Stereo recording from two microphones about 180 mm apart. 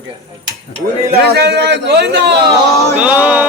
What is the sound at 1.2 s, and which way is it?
A man's voice, 65° right (ahead or behind).